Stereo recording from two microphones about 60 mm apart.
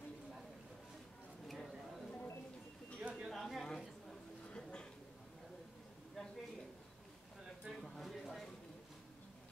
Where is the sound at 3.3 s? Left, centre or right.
Centre.